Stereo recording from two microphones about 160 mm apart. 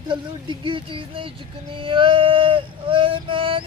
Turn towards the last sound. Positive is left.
turn(degrees=-35)  # may be behind; listen again after turning